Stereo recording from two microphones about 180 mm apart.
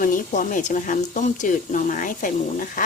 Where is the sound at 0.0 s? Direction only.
50° left (ahead or behind).